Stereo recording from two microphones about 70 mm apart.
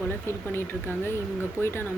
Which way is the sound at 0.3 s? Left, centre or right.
Left.